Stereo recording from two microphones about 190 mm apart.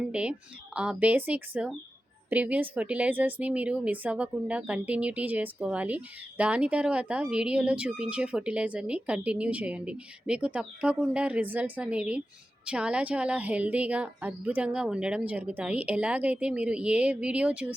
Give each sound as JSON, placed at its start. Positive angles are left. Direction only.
{"t": 0.0, "sound": "speech", "side_deg": -5}